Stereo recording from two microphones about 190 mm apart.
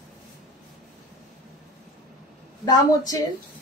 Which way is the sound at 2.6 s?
20° left (ahead or behind).